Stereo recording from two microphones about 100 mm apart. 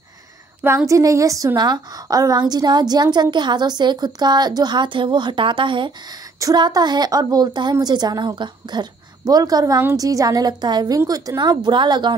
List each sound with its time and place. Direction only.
0.6 s a woman's voice: 20° right (ahead or behind); by 5.9 s 55° right (ahead or behind)
6.4 s a woman's voice: 40° right (ahead or behind)